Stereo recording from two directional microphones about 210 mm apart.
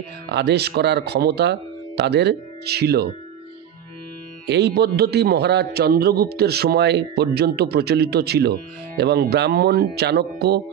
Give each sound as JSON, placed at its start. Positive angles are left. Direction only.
{"t": 0.3, "sound": "a man's voice", "side_deg": -55}
{"t": 4.5, "sound": "a man's voice", "side_deg": -50}